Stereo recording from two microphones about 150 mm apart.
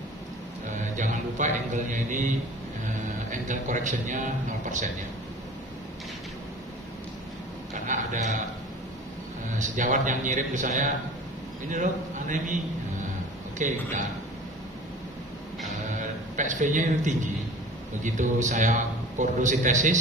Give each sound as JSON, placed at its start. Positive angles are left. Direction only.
{"t": 0.9, "sound": "a man's voice", "side_deg": -55}
{"t": 7.7, "sound": "a man's voice", "side_deg": -55}
{"t": 9.6, "sound": "a man's voice", "side_deg": -60}
{"t": 13.6, "sound": "a man's voice", "side_deg": -55}
{"t": 16.3, "sound": "a man's voice", "side_deg": -55}